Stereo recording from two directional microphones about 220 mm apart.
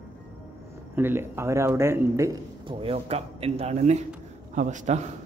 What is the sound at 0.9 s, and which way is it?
A man's voice, 10° right (ahead or behind).